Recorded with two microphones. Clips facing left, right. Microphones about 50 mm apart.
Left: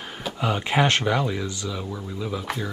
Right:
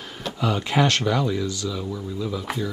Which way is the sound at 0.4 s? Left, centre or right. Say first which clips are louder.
Right 1 dB; left.